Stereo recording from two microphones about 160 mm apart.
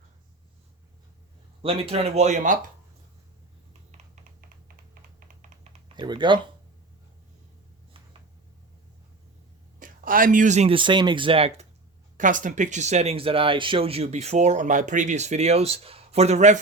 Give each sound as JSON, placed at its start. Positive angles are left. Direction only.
{"t": 1.6, "sound": "speech", "side_deg": -35}
{"t": 3.9, "sound": "typing", "side_deg": -50}
{"t": 6.0, "sound": "speech", "side_deg": -30}
{"t": 9.8, "sound": "speech", "side_deg": -60}
{"t": 10.8, "sound": "speech", "side_deg": -30}
{"t": 12.1, "sound": "speech", "side_deg": -55}